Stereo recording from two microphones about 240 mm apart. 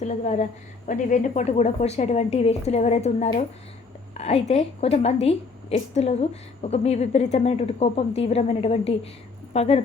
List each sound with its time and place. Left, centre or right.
0.0 s a woman's voice: left
4.4 s a woman's voice: left